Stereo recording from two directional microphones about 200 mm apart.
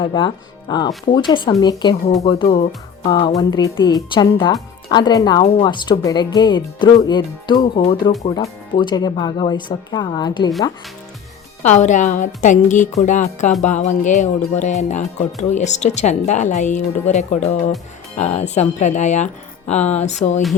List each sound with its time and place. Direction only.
0.0 s speech: 25° left (ahead or behind)
2.0 s speech: 30° left (ahead or behind)
11.6 s speech: 35° left (ahead or behind)